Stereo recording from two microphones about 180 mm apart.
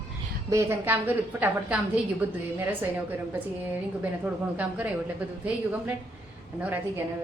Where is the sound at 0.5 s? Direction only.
10° right (ahead or behind).